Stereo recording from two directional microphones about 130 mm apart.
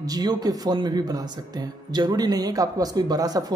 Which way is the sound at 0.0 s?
30° right (ahead or behind).